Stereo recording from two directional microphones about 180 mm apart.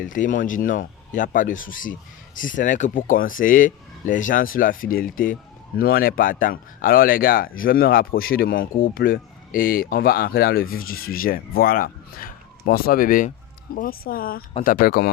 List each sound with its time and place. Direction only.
0.0 s speech: 45° left (ahead or behind)